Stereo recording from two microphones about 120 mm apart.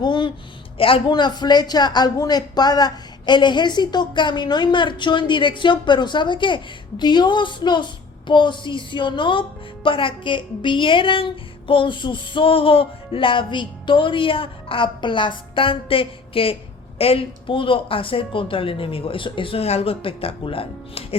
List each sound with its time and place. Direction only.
0.0 s a sound: 40° left (ahead or behind)
0.8 s speech: 50° left (ahead or behind)
9.8 s music: 45° left (ahead or behind)